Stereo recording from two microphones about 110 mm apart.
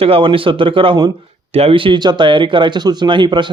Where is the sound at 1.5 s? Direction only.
60° right (ahead or behind).